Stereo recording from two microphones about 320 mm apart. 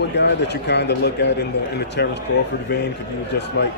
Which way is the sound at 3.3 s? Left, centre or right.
Left.